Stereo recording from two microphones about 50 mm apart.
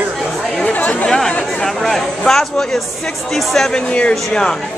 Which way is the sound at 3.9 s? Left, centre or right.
Left.